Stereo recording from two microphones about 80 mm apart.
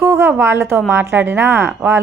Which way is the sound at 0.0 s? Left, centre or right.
Right.